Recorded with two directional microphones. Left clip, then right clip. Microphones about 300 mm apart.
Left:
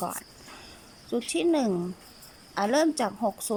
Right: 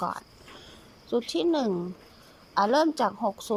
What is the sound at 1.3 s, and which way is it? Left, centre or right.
Speech, centre.